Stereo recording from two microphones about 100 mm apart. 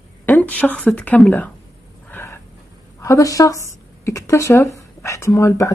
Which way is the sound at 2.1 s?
25° left (ahead or behind).